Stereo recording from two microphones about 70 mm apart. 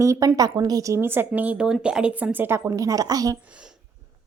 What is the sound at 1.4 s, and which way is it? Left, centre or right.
A woman's voice, centre.